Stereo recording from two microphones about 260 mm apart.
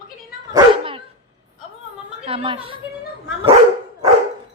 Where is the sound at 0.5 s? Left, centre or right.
Right.